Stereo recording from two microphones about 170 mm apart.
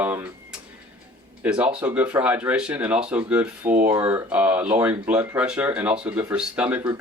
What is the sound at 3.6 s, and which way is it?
Speech, 50° right (ahead or behind).